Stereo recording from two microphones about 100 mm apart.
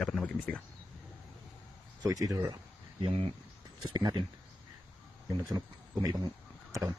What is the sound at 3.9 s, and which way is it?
Speech, 45° right (ahead or behind).